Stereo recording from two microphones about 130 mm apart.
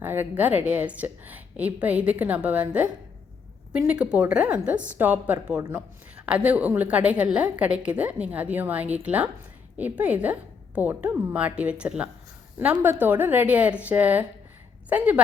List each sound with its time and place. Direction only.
0.0 s a woman's voice: 15° right (ahead or behind)